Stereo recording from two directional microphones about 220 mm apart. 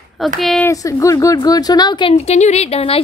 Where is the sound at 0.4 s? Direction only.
Centre (ahead or behind).